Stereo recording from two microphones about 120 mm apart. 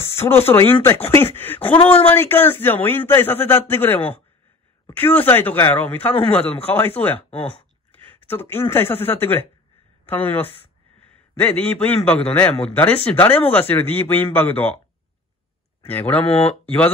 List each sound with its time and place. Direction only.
0.1 s a sound: 20° left (ahead or behind)
0.5 s a man's voice: 20° left (ahead or behind)
7.2 s speech: 55° left (ahead or behind)
7.9 s a man's voice: 15° left (ahead or behind)
10.6 s a sound: 15° left (ahead or behind)
12.6 s a man's voice: 15° left (ahead or behind)
15.9 s a man's voice: 15° left (ahead or behind)
16.3 s speech: 55° left (ahead or behind)
16.6 s music: 15° left (ahead or behind)